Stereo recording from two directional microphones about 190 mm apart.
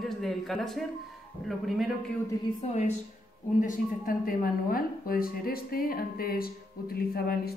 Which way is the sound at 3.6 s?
50° left (ahead or behind).